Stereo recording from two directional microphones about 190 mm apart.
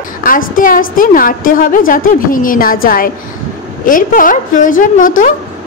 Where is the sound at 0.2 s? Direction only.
45° left (ahead or behind).